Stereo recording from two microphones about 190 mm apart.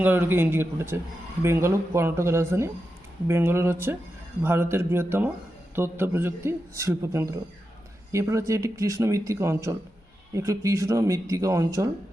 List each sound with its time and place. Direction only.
0.0 s a man's voice: 10° right (ahead or behind)